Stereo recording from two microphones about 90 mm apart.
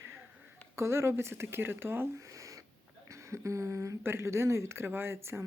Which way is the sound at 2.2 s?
40° right (ahead or behind).